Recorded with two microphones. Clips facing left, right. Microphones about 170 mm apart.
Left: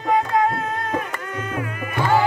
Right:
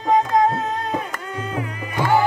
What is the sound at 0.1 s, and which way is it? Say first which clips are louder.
Tabla: right 2 dB; 20° right (ahead or behind).